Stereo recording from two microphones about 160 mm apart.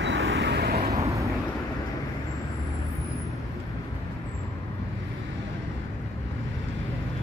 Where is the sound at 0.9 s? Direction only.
20° right (ahead or behind).